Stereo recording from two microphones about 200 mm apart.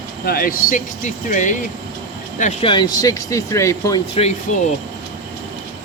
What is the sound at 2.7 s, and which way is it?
Speech, 20° left (ahead or behind).